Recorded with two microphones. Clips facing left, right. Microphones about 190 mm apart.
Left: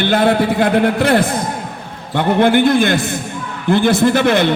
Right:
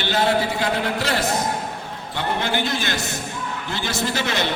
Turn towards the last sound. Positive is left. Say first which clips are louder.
# left 11 dB
turn(degrees=55)  # may be behind; listen again after turning